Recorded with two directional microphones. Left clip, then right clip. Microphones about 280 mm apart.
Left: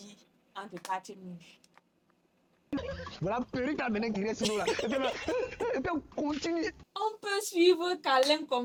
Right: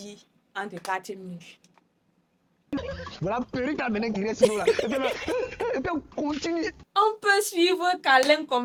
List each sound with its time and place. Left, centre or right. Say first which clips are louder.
0.0 s a sound: right 10 dB; right
0.9 s speech: right 3 dB; right
2.6 s speech: right 4 dB; centre
6.9 s a woman's voice: right 13 dB; right